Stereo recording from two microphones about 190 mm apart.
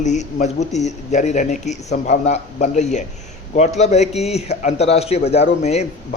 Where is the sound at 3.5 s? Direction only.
35° left (ahead or behind).